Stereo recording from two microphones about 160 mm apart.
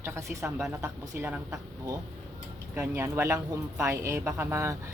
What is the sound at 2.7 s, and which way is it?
Speech, 15° right (ahead or behind).